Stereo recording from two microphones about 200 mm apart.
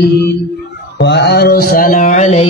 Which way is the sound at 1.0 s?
55° left (ahead or behind).